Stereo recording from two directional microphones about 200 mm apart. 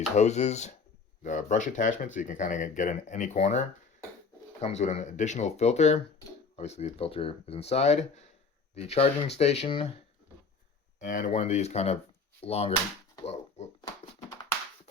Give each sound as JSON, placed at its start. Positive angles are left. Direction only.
{"t": 0.2, "sound": "speech", "side_deg": 35}
{"t": 4.6, "sound": "speech", "side_deg": 35}
{"t": 11.0, "sound": "speech", "side_deg": 40}
{"t": 13.2, "sound": "a sound", "side_deg": 30}